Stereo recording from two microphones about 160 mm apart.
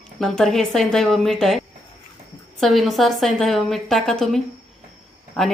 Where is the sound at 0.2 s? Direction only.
Centre (ahead or behind).